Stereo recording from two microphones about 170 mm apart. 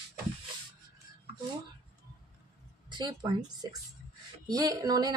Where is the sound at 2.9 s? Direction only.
25° right (ahead or behind).